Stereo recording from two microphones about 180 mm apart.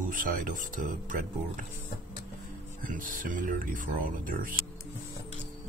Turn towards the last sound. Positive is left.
turn(degrees=-50)  # may be behind; listen again after turning